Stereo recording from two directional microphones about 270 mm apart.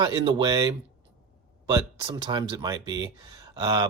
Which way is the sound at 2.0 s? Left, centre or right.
Centre.